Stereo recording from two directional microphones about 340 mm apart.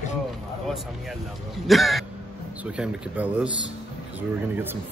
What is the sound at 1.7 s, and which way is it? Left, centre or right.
Speech, centre.